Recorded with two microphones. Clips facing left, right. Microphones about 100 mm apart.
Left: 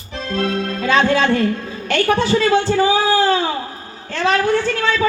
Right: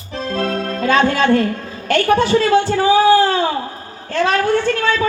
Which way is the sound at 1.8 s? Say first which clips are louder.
Right 3 dB; 50° right (ahead or behind).